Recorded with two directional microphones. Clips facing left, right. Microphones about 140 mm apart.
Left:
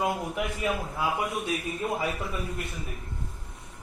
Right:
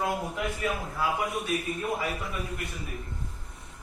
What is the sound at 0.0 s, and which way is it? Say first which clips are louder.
Speech: left 1 dB; 15° left (ahead or behind).